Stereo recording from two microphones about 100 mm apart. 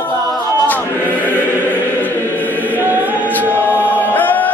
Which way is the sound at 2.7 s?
20° right (ahead or behind).